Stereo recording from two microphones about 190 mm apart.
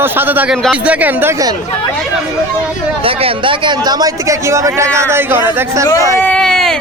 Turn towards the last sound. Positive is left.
turn(degrees=5)  # may be behind; listen again after turning